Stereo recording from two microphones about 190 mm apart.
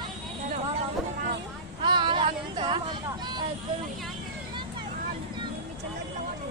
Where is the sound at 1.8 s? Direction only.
25° right (ahead or behind).